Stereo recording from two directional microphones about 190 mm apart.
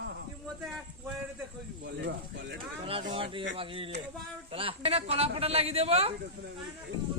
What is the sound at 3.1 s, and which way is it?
A man's voice, 30° right (ahead or behind).